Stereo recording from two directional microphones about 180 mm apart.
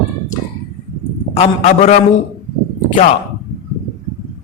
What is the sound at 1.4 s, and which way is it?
Speech, 35° left (ahead or behind).